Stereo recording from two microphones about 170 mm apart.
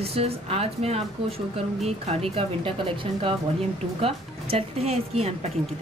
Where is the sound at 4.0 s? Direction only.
35° right (ahead or behind).